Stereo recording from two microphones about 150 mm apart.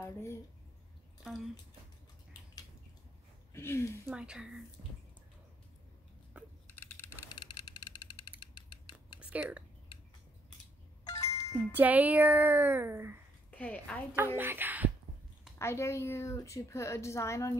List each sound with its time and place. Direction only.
0.0 s speech: 20° left (ahead or behind)
1.2 s speech: centre (ahead or behind)
3.5 s speech: 15° left (ahead or behind)
4.1 s speech: 5° right (ahead or behind)
6.4 s a sound: 10° right (ahead or behind)
6.7 s typing: 15° left (ahead or behind)
7.2 s a sound: 30° left (ahead or behind)
9.3 s speech: 10° right (ahead or behind)
9.9 s scissors: 35° left (ahead or behind)
11.1 s music: 20° left (ahead or behind)
11.7 s speech: 10° right (ahead or behind)
13.5 s a woman's voice: 10° left (ahead or behind)
14.1 s speech: 15° right (ahead or behind)
15.6 s a woman's voice: 20° left (ahead or behind)